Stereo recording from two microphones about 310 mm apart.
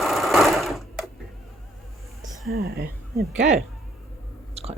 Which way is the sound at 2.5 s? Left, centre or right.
Right.